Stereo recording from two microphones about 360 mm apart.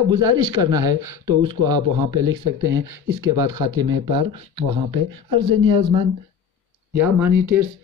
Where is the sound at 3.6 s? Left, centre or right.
Right.